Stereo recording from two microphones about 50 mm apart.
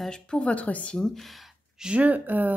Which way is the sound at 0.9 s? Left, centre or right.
Centre.